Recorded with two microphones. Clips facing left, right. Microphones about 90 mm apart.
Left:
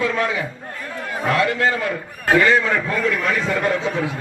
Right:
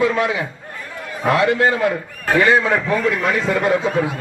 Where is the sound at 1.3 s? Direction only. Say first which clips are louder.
Right 4 dB; 20° right (ahead or behind).